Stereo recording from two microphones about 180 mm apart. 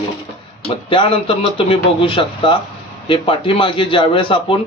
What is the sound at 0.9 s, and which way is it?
Speech, 30° left (ahead or behind).